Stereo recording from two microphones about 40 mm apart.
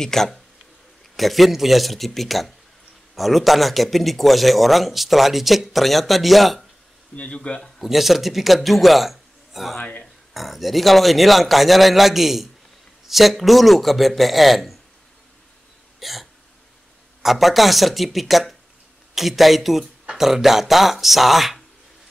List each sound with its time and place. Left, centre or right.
0.0 s speech: centre
7.2 s speech: left
7.8 s a man's voice: centre
9.8 s speech: left
10.3 s speech: centre
16.0 s hiccup: centre
17.2 s speech: centre